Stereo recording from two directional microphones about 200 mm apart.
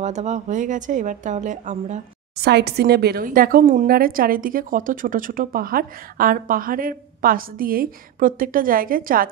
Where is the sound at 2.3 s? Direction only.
55° right (ahead or behind).